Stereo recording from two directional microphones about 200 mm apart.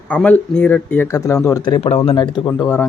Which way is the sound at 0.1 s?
5° left (ahead or behind).